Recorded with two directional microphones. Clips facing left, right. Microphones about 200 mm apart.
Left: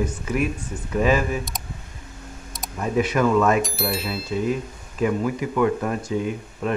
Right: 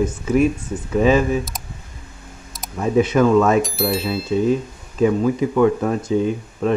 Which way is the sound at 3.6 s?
Centre (ahead or behind).